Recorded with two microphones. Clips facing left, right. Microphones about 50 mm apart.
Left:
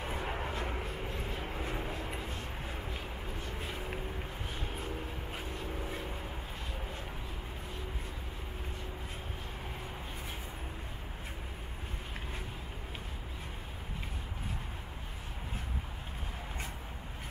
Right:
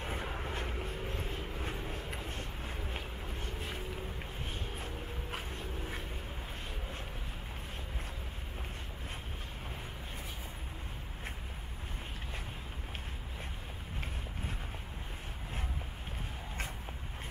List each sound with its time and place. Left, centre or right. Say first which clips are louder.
0.2 s vehicle: left 3 dB; left
1.6 s vehicle: left 4 dB; left
2.9 s vehicle: left 1 dB; right